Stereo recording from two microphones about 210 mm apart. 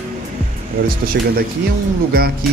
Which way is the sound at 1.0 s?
45° right (ahead or behind).